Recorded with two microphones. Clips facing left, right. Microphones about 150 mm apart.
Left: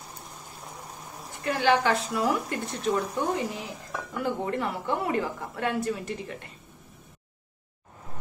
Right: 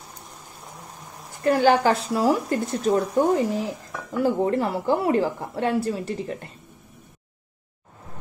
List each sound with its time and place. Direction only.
1.4 s speech: 40° right (ahead or behind)